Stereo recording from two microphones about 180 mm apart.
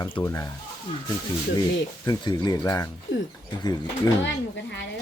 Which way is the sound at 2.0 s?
25° left (ahead or behind).